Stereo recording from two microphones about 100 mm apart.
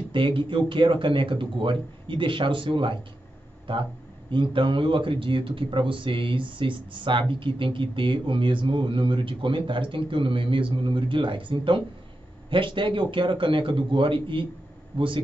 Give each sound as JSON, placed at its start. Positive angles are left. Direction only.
{"t": 0.1, "sound": "speech", "side_deg": -55}